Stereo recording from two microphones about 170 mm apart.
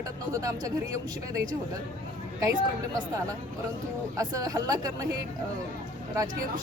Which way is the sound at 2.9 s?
20° right (ahead or behind).